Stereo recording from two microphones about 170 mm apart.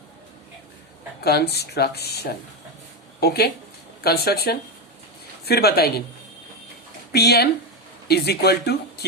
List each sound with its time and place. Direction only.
1.2 s speech: 70° left (ahead or behind)
7.1 s speech: 70° left (ahead or behind)